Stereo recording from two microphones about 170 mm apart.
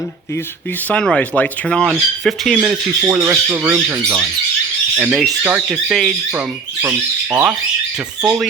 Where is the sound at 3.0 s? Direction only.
15° right (ahead or behind).